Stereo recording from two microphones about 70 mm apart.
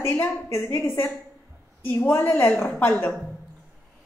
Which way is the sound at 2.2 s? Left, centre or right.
Left.